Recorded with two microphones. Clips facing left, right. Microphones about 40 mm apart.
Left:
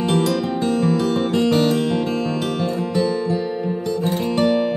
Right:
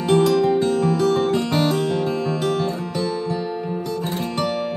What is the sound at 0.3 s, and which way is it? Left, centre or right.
Music, centre.